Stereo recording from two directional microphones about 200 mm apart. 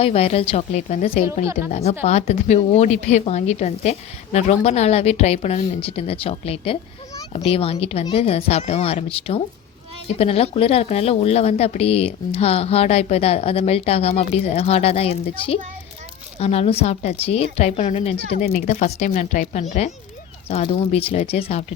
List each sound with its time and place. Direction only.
0.0 s a woman's voice: 30° left (ahead or behind)
18.3 s a woman's voice: 40° left (ahead or behind)